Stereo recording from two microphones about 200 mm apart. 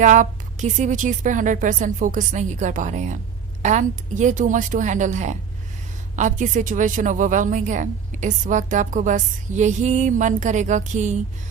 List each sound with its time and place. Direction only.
0.0 s a woman's voice: 40° right (ahead or behind)